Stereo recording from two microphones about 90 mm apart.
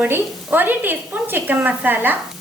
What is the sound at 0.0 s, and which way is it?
A woman's voice, 20° right (ahead or behind).